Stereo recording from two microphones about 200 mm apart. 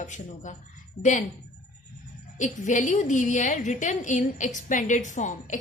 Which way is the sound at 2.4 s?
40° left (ahead or behind).